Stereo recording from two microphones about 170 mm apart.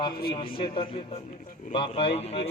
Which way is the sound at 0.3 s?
30° left (ahead or behind).